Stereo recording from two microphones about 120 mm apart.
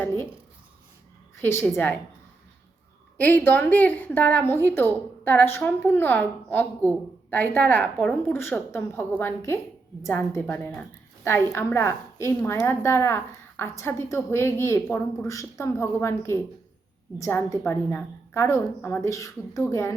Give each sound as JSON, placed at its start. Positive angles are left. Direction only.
{"t": 1.4, "sound": "a woman's voice", "side_deg": 20}
{"t": 3.2, "sound": "a woman's voice", "side_deg": 15}
{"t": 19.0, "sound": "a woman's voice", "side_deg": 25}